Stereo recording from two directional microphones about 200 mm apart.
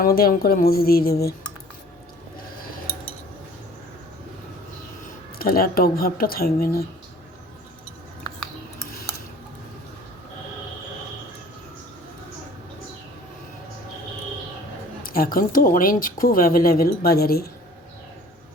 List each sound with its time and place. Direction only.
0.0 s speech: 50° left (ahead or behind)
5.4 s speech: 45° left (ahead or behind)
15.0 s speech: 45° left (ahead or behind)